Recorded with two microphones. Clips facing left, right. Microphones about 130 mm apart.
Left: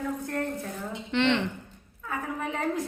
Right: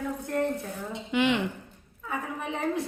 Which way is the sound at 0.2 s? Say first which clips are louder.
Right 2 dB; 15° right (ahead or behind).